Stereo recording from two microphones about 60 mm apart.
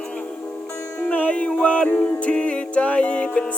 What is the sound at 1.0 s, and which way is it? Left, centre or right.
Music, centre.